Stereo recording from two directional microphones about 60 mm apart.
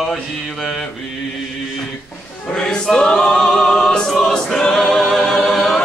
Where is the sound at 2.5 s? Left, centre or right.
Centre.